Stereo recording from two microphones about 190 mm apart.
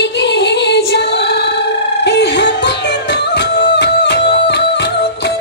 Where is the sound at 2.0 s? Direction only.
65° left (ahead or behind).